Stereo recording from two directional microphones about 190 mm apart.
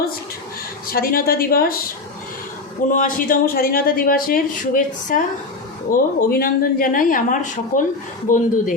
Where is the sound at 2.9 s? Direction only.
45° left (ahead or behind).